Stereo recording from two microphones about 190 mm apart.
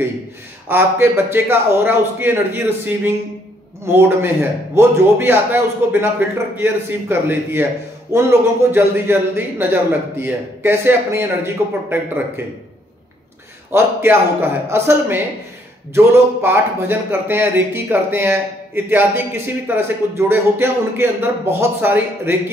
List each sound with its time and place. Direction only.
0.7 s a man's voice: 10° right (ahead or behind)
13.7 s a man's voice: 10° right (ahead or behind)